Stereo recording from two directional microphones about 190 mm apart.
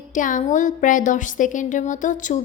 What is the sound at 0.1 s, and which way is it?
A woman's voice, 45° left (ahead or behind).